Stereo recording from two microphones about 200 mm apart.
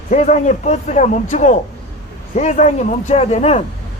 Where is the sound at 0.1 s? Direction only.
35° left (ahead or behind).